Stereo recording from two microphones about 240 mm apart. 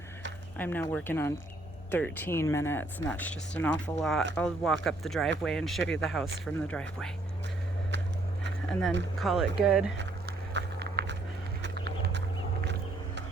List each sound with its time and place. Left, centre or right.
0.5 s speech: centre
9.1 s speech: centre
10.5 s walk: right
11.6 s a sound: right